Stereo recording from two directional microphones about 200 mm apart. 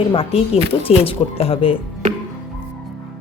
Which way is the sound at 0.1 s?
30° left (ahead or behind).